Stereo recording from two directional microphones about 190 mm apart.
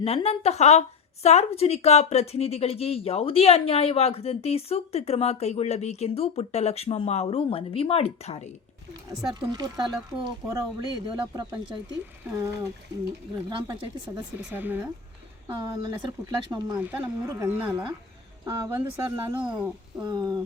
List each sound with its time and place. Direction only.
0.0 s speech: 30° left (ahead or behind)
8.9 s speech: 20° right (ahead or behind)
14.1 s speech: 10° right (ahead or behind)
15.4 s speech: 20° right (ahead or behind)
19.5 s speech: 5° right (ahead or behind)
20.0 s speech: 20° right (ahead or behind)